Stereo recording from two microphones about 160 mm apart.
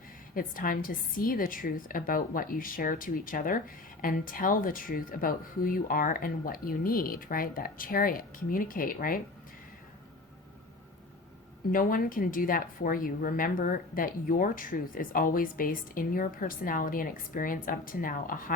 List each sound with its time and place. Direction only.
0.3 s speech: 60° left (ahead or behind)
11.7 s speech: 60° left (ahead or behind)